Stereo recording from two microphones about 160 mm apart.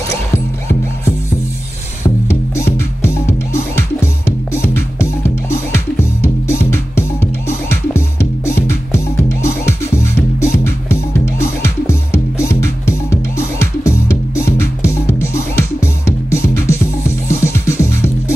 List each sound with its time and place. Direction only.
2.2 s music: 15° left (ahead or behind)